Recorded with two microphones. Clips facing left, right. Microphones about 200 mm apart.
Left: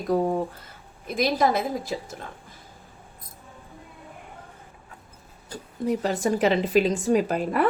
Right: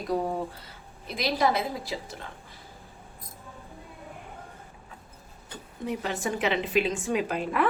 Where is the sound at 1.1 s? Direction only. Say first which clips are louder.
Left 3 dB; 45° left (ahead or behind).